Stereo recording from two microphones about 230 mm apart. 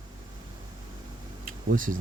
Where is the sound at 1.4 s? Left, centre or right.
Right.